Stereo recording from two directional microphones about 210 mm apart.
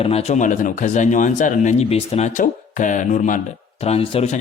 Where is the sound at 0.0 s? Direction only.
30° left (ahead or behind).